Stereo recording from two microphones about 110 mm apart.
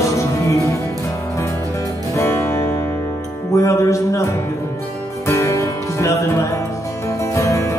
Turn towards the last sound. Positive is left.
turn(degrees=25)  # may be behind; listen again after turning